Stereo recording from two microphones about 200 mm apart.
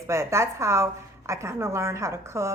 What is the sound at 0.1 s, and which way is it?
A woman's voice, 15° right (ahead or behind).